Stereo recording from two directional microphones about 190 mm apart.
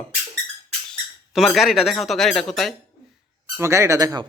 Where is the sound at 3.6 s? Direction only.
15° right (ahead or behind).